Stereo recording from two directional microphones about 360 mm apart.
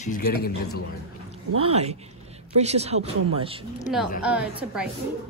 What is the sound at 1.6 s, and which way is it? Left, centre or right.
Speech, centre.